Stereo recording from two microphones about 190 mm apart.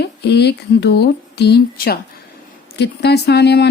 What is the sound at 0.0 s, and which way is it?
Speech, 60° left (ahead or behind).